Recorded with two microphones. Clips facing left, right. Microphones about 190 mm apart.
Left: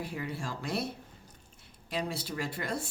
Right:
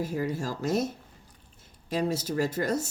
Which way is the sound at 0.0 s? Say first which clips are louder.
Right 7 dB; 40° right (ahead or behind).